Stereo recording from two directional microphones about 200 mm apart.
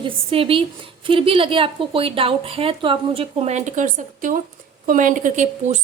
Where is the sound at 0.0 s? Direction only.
30° right (ahead or behind).